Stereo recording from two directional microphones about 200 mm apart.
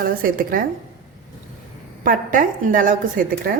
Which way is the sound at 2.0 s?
40° right (ahead or behind).